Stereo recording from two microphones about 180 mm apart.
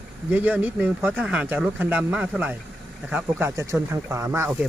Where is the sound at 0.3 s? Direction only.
10° right (ahead or behind).